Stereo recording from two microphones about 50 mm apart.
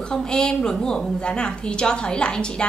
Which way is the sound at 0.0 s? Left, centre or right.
Centre.